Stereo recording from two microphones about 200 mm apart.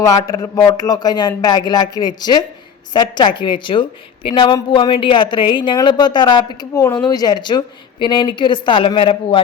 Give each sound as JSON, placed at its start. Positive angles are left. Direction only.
{"t": 0.0, "sound": "speech", "side_deg": 15}